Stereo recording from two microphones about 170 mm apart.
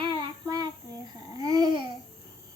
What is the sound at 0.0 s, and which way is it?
Child singing, 25° right (ahead or behind).